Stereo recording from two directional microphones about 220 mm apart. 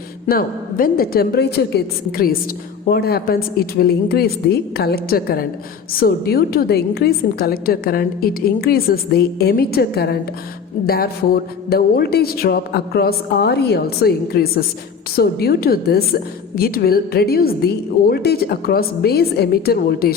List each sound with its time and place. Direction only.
0.3 s a woman's voice: 40° left (ahead or behind)